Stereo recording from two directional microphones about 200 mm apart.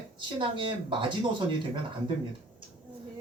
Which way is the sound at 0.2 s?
25° right (ahead or behind).